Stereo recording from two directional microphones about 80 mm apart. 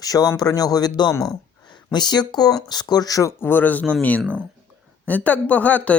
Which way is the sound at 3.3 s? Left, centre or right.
Left.